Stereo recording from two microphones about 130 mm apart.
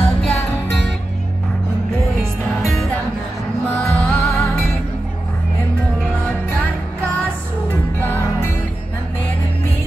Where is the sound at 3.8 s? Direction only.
5° left (ahead or behind).